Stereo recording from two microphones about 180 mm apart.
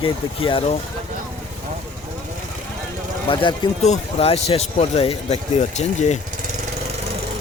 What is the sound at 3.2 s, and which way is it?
Speech, 30° left (ahead or behind).